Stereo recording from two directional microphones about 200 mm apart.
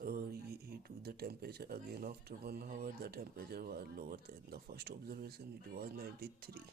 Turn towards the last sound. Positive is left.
turn(degrees=-50)  # may be behind; listen again after turning